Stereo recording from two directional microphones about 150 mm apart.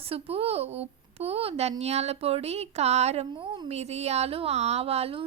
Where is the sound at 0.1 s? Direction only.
40° right (ahead or behind).